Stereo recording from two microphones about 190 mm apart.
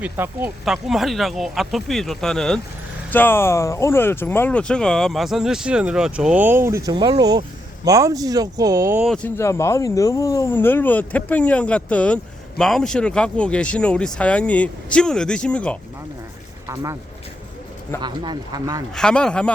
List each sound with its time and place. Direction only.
0.0 s speech: 10° right (ahead or behind)
9.0 s speech: 5° left (ahead or behind)
16.6 s speech: 15° right (ahead or behind)
18.0 s speech: 25° right (ahead or behind)
18.9 s speech: 5° left (ahead or behind)